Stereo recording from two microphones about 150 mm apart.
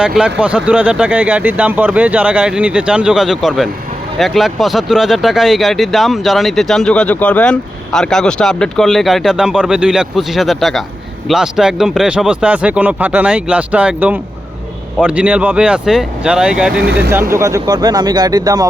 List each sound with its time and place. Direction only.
0.0 s speech: 5° right (ahead or behind)
16.8 s speech: 90° right
17.1 s speech: 15° right (ahead or behind)